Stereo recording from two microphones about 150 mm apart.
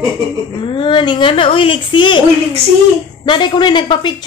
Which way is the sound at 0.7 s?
35° left (ahead or behind).